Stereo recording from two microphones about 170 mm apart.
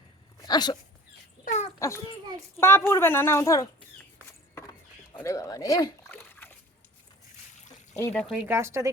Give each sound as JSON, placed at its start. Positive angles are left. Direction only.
{"t": 0.4, "sound": "speech", "side_deg": 25}
{"t": 1.5, "sound": "a sound", "side_deg": 45}
{"t": 2.6, "sound": "a woman's voice", "side_deg": 15}
{"t": 5.1, "sound": "dog", "side_deg": 20}
{"t": 8.1, "sound": "speech", "side_deg": 5}
{"t": 8.4, "sound": "speech", "side_deg": -15}